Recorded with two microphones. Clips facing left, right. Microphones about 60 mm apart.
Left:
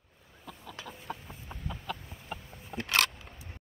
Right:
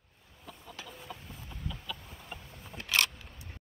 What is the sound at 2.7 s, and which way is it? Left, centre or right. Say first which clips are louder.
Camera: left 8 dB; left.